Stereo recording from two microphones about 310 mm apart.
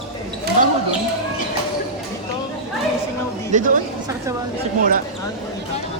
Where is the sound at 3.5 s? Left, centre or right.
Right.